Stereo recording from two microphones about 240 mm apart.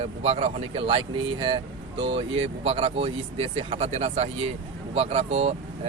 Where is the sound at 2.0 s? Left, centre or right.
Right.